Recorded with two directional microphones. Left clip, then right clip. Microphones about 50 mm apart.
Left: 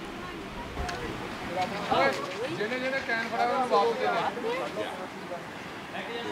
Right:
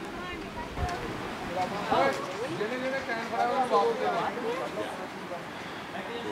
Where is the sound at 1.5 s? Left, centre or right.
Left.